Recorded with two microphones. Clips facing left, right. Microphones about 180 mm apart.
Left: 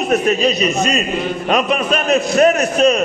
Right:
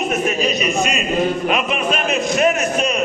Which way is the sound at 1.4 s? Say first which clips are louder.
Left 3 dB; 40° left (ahead or behind).